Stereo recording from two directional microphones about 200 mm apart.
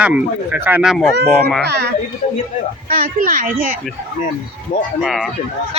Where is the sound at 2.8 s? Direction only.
45° right (ahead or behind).